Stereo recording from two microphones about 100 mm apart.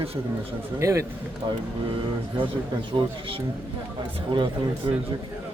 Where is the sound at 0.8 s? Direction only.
30° right (ahead or behind).